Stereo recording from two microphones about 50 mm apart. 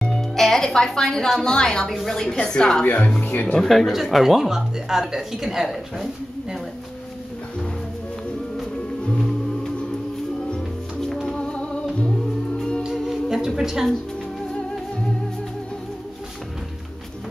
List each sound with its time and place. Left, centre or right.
0.0 s a woman's voice: centre
2.8 s speech: left
3.5 s speech: centre
10.5 s music: centre
12.8 s music: centre